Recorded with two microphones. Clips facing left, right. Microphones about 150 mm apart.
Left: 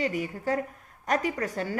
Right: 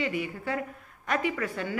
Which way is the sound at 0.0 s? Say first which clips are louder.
Left 2 dB; 40° left (ahead or behind).